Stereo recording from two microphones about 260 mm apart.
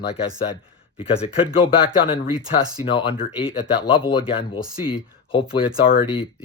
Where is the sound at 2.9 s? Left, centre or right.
Centre.